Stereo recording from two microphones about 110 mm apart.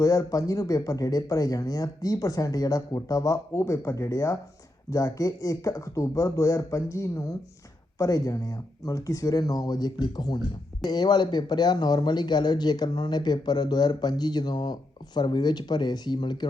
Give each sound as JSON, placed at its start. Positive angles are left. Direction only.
{"t": 0.0, "sound": "speech", "side_deg": 30}